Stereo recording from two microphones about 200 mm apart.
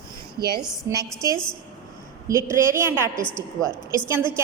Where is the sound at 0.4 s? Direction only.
50° right (ahead or behind).